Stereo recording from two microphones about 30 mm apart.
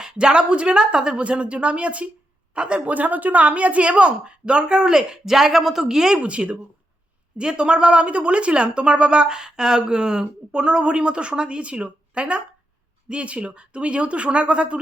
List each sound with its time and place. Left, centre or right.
0.0 s speech: right
1.2 s a woman's voice: right
2.6 s speech: right
2.8 s a woman's voice: right
4.9 s a woman's voice: centre
6.2 s speech: right